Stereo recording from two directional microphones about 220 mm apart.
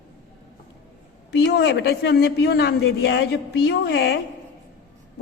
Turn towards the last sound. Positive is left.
turn(degrees=50)  # may be behind; listen again after turning